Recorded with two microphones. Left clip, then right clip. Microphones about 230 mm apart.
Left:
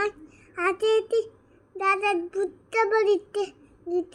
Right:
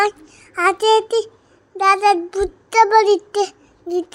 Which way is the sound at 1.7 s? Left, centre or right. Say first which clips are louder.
Right 10 dB; centre.